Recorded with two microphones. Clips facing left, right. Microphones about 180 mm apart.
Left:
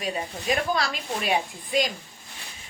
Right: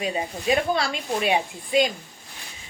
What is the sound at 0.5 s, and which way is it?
Speech, 25° right (ahead or behind).